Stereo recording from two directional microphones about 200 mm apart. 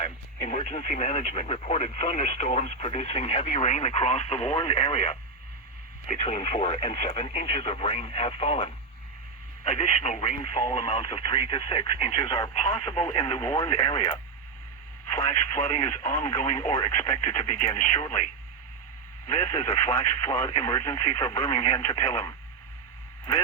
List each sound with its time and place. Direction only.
0.0 s speech: 35° left (ahead or behind)
15.6 s speech: 30° left (ahead or behind)
19.4 s speech: 30° left (ahead or behind)
20.6 s speech: 15° left (ahead or behind)
21.3 s speech: 30° left (ahead or behind)
21.8 s speech: 15° left (ahead or behind)